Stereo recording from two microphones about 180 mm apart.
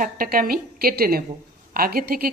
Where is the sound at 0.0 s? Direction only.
55° right (ahead or behind).